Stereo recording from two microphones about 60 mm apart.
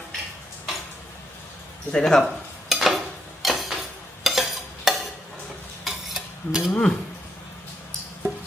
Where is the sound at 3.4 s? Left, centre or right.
Centre.